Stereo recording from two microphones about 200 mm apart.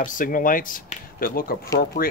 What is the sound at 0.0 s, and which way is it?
Speech, 40° left (ahead or behind).